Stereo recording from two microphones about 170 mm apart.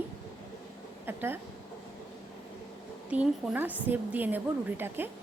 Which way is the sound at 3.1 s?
5° right (ahead or behind).